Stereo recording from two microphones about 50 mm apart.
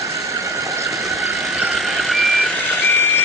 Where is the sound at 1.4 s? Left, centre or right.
Centre.